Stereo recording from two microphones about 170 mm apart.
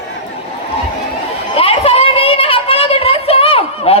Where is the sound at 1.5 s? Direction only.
35° left (ahead or behind).